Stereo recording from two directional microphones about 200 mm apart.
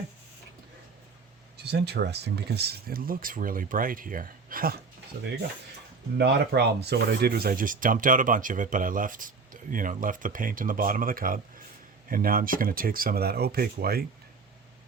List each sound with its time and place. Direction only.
1.6 s speech: 55° right (ahead or behind)
6.1 s speech: 55° right (ahead or behind)